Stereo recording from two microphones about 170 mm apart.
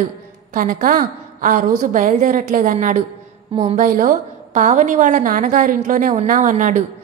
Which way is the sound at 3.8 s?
50° right (ahead or behind).